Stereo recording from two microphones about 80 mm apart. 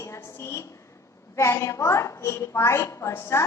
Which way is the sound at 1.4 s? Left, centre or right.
Left.